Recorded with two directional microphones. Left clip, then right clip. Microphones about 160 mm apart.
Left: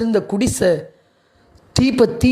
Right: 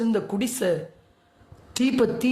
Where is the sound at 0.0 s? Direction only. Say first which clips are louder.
Left 7 dB; 30° left (ahead or behind).